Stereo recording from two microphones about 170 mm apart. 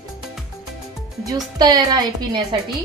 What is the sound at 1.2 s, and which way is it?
A woman's voice, 25° right (ahead or behind).